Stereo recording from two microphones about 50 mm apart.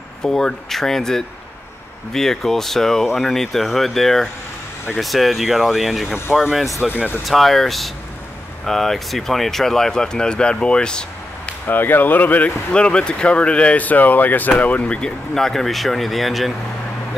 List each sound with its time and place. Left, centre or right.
0.2 s speech: centre
11.6 s speech: left
12.7 s speech: centre